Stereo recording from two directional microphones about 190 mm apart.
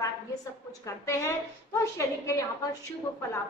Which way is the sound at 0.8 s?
15° left (ahead or behind).